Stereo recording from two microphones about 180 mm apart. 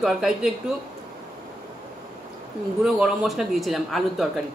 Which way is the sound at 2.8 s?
5° right (ahead or behind).